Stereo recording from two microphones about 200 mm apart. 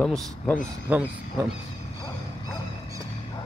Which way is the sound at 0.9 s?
10° right (ahead or behind).